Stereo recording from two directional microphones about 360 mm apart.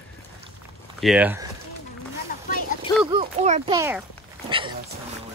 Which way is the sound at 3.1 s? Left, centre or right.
Centre.